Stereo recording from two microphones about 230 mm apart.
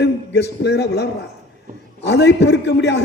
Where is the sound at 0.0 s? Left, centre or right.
Left.